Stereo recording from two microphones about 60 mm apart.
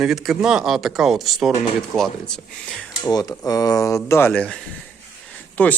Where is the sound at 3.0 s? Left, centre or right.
Left.